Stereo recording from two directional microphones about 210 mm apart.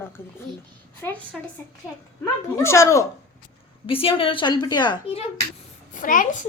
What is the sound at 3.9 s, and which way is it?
A woman's voice, 25° left (ahead or behind).